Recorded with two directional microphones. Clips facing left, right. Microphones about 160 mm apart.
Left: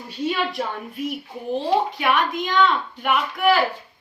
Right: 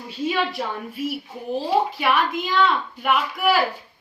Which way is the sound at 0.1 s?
Centre (ahead or behind).